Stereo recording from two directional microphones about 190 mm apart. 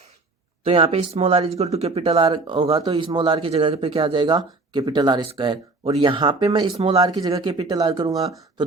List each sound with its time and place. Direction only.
0.6 s speech: 30° right (ahead or behind)